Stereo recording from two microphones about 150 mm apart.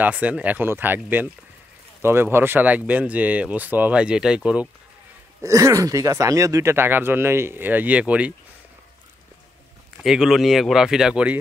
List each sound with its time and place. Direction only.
0.0 s speech: 10° right (ahead or behind)
5.4 s speech: 20° right (ahead or behind)
10.0 s speech: 5° right (ahead or behind)